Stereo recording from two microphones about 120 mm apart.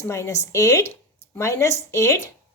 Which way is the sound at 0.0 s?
25° left (ahead or behind).